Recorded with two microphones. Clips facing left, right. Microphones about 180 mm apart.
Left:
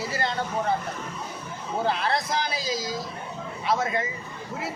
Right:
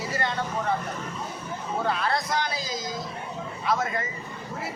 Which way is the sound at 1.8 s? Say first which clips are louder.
Left 2 dB; 30° left (ahead or behind).